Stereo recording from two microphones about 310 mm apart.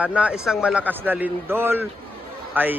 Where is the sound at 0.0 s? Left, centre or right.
Centre.